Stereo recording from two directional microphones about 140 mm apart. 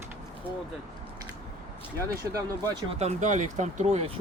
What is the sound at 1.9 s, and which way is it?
Speech, 20° right (ahead or behind).